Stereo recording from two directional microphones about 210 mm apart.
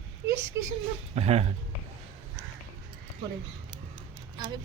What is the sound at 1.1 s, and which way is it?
Speech, 30° right (ahead or behind).